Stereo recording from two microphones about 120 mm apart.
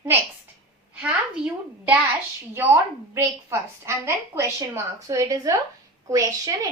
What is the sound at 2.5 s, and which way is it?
A woman's voice, 20° right (ahead or behind).